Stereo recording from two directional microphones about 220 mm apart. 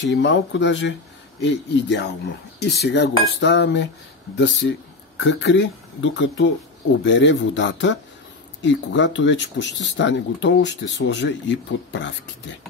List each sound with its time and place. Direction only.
0.1 s speech: 55° left (ahead or behind)
1.4 s cutlery: 50° left (ahead or behind)
4.4 s speech: 55° left (ahead or behind)